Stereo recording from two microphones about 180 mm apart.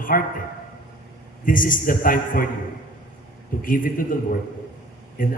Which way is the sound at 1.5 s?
50° left (ahead or behind).